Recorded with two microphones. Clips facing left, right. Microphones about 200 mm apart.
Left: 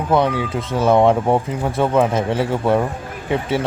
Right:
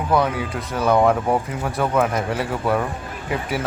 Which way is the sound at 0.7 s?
25° left (ahead or behind).